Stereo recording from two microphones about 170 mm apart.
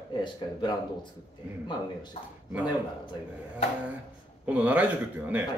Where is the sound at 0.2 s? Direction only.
25° left (ahead or behind).